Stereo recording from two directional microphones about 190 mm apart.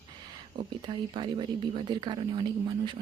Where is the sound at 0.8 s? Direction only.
25° right (ahead or behind).